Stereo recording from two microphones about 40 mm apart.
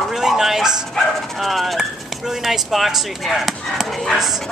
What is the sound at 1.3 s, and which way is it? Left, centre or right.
Speech, centre.